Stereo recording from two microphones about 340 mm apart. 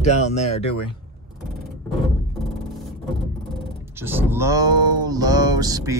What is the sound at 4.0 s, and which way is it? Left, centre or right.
Speech, centre.